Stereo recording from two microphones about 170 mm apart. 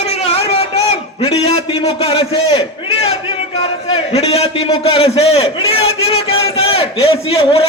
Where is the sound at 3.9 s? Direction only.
35° left (ahead or behind).